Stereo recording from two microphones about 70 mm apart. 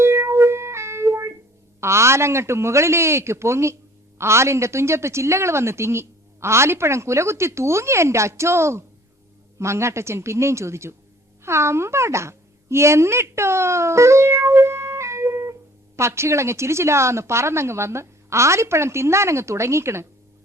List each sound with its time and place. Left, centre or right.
0.0 s music: right
1.8 s speech: right